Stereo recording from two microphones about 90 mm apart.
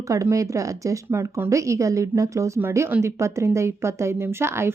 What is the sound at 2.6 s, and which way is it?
A woman's voice, 25° right (ahead or behind).